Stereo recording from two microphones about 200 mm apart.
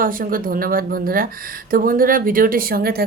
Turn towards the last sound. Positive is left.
turn(degrees=-50)  # may be behind; listen again after turning